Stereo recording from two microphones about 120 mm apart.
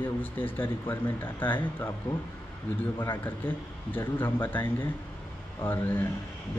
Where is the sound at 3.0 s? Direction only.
15° left (ahead or behind).